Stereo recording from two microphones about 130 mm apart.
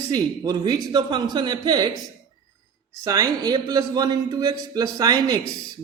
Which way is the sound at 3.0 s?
25° right (ahead or behind).